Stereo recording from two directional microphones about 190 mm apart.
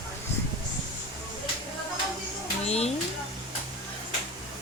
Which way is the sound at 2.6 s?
35° left (ahead or behind).